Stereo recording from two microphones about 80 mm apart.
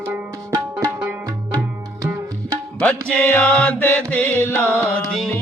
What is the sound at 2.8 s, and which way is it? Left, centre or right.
Music, centre.